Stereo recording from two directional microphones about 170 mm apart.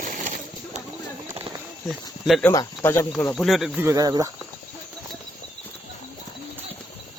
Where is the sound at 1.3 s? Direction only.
25° right (ahead or behind).